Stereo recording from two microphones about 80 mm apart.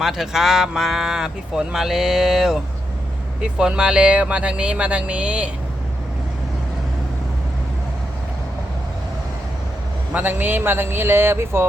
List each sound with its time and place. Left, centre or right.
0.0 s speech: centre
10.1 s a man's voice: centre